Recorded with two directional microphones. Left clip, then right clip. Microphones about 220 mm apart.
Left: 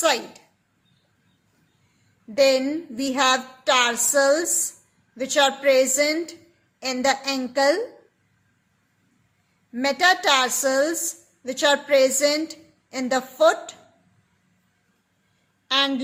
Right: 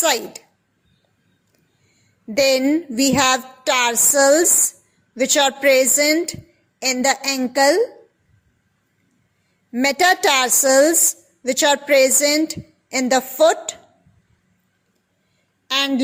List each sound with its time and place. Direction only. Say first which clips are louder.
0.0 s a child's voice: right 2 dB; 40° right (ahead or behind)
2.3 s a woman's voice: right 3 dB; 40° right (ahead or behind)
9.7 s a woman's voice: right 3 dB; 40° right (ahead or behind)
15.6 s a woman's voice: right 1 dB; 40° right (ahead or behind)